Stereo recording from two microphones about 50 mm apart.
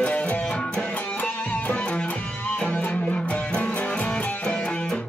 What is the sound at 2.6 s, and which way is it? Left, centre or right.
Music, left.